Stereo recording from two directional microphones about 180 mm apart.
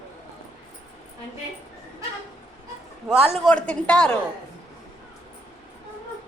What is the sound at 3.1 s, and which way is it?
Speech, 35° right (ahead or behind).